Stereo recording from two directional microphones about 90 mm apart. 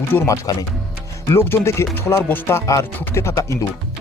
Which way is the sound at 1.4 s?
30° left (ahead or behind).